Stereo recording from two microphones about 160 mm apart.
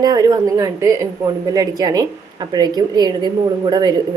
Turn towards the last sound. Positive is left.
turn(degrees=-25)  # may be behind; listen again after turning